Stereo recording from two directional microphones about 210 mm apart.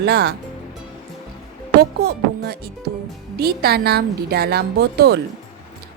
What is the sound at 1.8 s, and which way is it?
A woman's voice, 45° right (ahead or behind).